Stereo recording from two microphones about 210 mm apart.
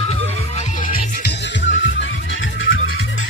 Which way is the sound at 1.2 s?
55° left (ahead or behind).